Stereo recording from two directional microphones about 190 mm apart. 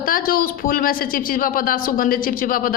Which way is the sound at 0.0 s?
50° left (ahead or behind).